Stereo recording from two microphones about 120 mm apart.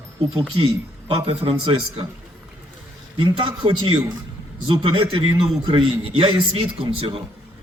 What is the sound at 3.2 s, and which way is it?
A man's voice, 45° right (ahead or behind).